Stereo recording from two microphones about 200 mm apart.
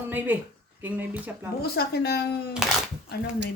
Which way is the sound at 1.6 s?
50° left (ahead or behind).